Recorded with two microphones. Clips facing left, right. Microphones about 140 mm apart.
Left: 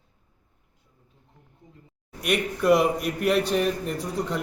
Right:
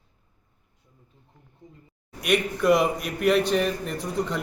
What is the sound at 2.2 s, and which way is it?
A man's voice, centre (ahead or behind).